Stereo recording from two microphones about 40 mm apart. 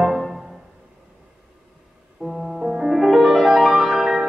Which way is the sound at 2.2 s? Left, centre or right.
Centre.